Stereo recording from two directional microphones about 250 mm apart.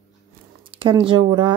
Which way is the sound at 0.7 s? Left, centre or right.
Right.